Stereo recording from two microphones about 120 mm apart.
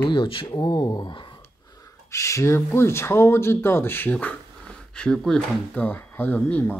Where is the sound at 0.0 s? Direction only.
40° left (ahead or behind).